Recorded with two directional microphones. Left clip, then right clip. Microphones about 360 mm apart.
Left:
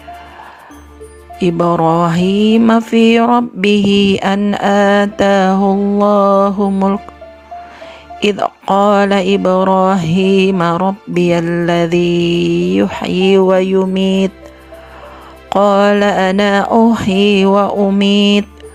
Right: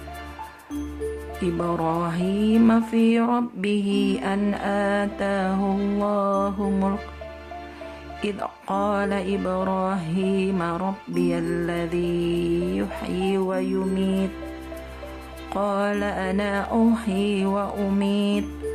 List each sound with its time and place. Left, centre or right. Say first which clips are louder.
1.4 s speech: left 13 dB; left
8.2 s speech: left 15 dB; left
15.4 s speech: left 14 dB; left